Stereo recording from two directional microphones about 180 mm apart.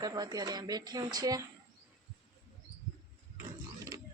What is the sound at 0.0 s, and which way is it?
Speech, 20° right (ahead or behind).